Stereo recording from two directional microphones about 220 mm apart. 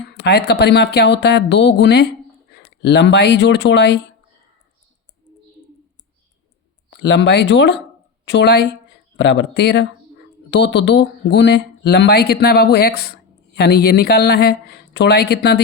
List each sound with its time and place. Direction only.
0.2 s speech: 50° left (ahead or behind)
6.9 s speech: 50° left (ahead or behind)